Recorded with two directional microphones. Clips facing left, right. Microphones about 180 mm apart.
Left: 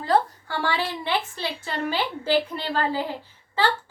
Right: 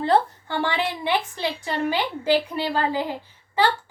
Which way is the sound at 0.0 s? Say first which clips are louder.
Right 2 dB; 25° right (ahead or behind).